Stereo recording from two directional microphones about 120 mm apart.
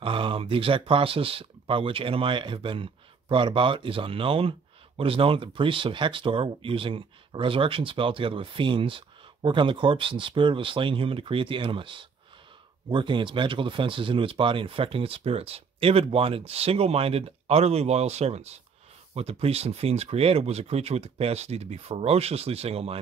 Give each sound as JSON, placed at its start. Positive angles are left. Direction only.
{"t": 0.0, "sound": "speech", "side_deg": -50}